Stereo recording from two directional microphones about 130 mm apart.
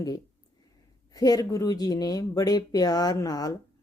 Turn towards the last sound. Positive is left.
turn(degrees=30)  # may be behind; listen again after turning